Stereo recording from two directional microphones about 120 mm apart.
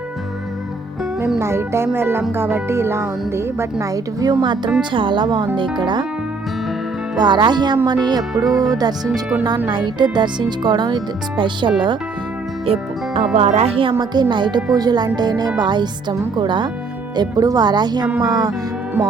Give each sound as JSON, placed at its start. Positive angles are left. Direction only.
{"t": 1.4, "sound": "speech", "side_deg": -20}
{"t": 7.2, "sound": "speech", "side_deg": -40}
{"t": 12.6, "sound": "music", "side_deg": -55}
{"t": 13.3, "sound": "speech", "side_deg": -65}
{"t": 14.0, "sound": "speech", "side_deg": -35}
{"t": 18.0, "sound": "music", "side_deg": -10}
{"t": 18.3, "sound": "speech", "side_deg": -35}